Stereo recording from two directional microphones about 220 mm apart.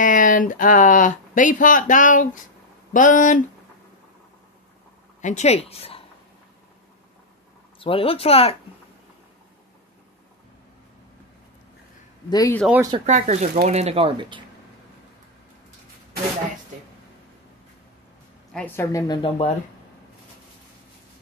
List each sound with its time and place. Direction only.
0.0 s speech: 35° left (ahead or behind)
5.2 s speech: 30° left (ahead or behind)
7.8 s speech: 25° left (ahead or behind)
12.3 s speech: 15° left (ahead or behind)
12.6 s speech: 10° right (ahead or behind)
12.9 s speech: 30° right (ahead or behind)
18.5 s speech: 10° left (ahead or behind); by 19.5 s 25° left (ahead or behind)